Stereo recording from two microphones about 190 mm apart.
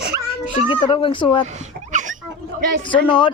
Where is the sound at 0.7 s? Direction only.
25° left (ahead or behind).